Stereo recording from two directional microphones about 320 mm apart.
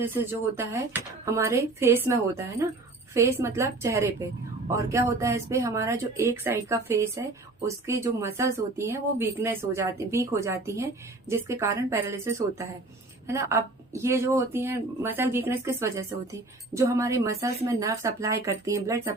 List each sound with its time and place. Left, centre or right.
0.0 s speech: centre